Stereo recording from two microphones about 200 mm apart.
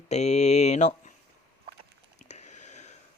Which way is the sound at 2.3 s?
35° left (ahead or behind).